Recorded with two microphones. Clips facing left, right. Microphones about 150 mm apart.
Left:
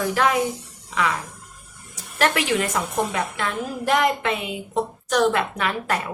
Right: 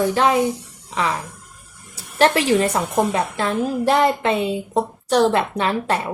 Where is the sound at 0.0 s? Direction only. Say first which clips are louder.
Right 4 dB; 30° right (ahead or behind).